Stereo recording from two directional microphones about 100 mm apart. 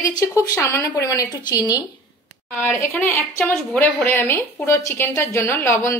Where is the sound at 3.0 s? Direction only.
20° left (ahead or behind).